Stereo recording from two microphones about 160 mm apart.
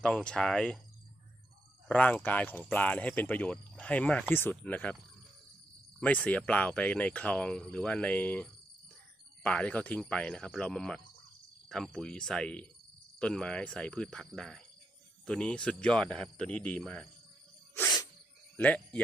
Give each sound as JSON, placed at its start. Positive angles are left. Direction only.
{"t": 0.0, "sound": "speech", "side_deg": 5}
{"t": 1.9, "sound": "speech", "side_deg": 10}
{"t": 6.0, "sound": "speech", "side_deg": 10}
{"t": 17.7, "sound": "snake", "side_deg": 20}
{"t": 18.5, "sound": "speech", "side_deg": 10}